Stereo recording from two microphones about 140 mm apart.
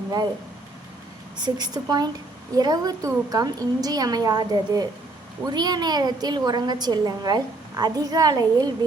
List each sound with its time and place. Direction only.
1.5 s a woman's voice: 30° right (ahead or behind)